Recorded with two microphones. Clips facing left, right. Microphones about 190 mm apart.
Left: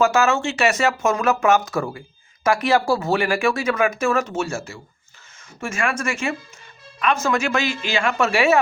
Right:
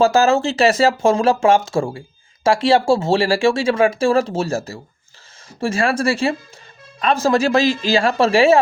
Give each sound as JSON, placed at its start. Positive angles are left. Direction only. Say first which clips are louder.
{"t": 0.0, "sound": "speech", "louder": "right 4 dB", "side_deg": -35}